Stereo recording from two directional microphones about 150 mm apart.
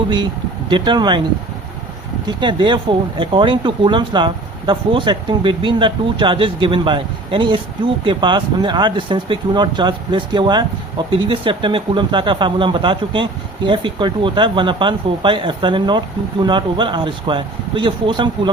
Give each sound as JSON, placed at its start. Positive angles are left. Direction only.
{"t": 0.7, "sound": "speech", "side_deg": -30}
{"t": 2.2, "sound": "speech", "side_deg": -30}